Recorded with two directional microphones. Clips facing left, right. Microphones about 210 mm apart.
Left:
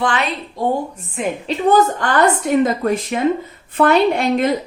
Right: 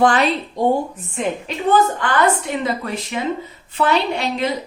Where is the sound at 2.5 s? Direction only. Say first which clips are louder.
Left 7 dB; 45° left (ahead or behind).